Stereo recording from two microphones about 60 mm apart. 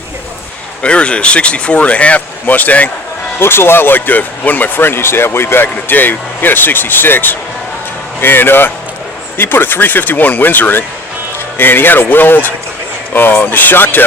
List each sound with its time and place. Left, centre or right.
0.8 s speech: centre
3.4 s speech: left